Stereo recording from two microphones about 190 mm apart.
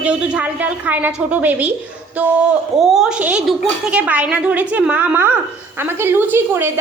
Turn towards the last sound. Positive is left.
turn(degrees=-10)  # may be behind; listen again after turning